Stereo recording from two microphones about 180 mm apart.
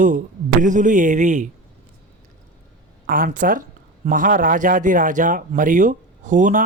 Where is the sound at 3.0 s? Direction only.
50° right (ahead or behind).